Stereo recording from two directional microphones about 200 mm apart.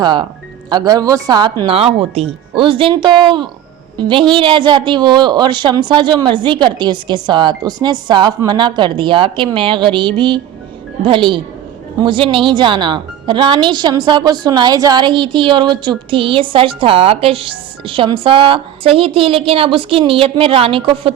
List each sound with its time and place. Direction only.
0.0 s speech: 25° right (ahead or behind)